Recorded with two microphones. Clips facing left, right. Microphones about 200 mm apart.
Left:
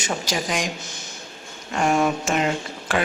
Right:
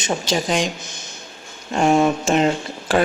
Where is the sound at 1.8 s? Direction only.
25° right (ahead or behind).